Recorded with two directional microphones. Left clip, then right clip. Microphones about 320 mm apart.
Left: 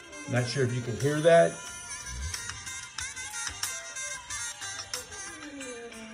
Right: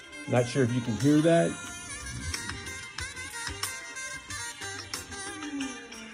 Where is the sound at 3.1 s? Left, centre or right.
Centre.